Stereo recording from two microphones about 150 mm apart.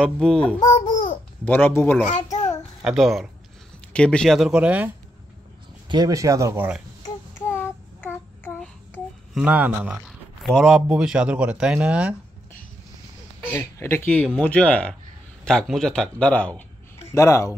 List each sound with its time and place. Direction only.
0.0 s a man's voice: 5° left (ahead or behind)
0.7 s babbling: 60° left (ahead or behind)
1.4 s speech: 15° left (ahead or behind)
2.8 s a man's voice: centre (ahead or behind)
5.9 s speech: 25° right (ahead or behind)
7.4 s child singing: 15° left (ahead or behind)
9.3 s speech: 5° right (ahead or behind)
13.5 s a man's voice: 15° left (ahead or behind)